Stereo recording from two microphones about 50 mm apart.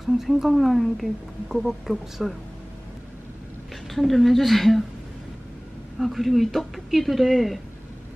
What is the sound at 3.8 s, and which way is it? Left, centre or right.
Speech, centre.